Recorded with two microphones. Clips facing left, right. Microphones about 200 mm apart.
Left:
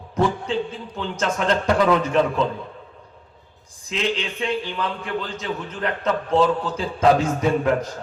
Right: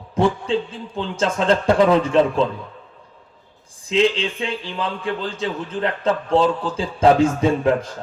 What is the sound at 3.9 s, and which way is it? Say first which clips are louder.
A man's voice: right 7 dB; 30° right (ahead or behind).